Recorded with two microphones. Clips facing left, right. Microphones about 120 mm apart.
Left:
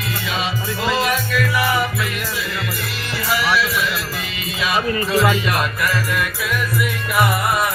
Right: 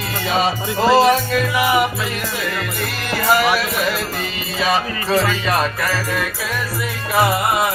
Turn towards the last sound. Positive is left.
turn(degrees=-25)  # may be behind; listen again after turning